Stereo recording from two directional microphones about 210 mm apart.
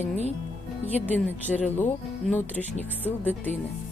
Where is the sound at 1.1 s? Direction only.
5° left (ahead or behind).